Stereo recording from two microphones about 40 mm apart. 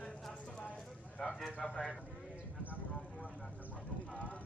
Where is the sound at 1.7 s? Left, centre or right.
Left.